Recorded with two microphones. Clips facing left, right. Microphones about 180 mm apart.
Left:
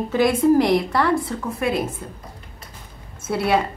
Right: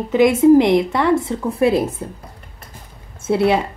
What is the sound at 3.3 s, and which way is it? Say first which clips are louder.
Speech: right 5 dB; 25° right (ahead or behind).